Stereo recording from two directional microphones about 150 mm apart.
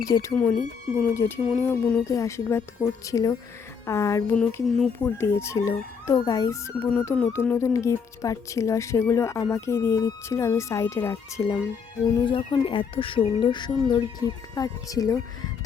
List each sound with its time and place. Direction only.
0.1 s speech: 20° left (ahead or behind)